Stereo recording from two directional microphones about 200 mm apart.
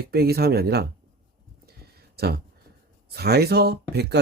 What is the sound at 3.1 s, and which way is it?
Speech, 50° right (ahead or behind).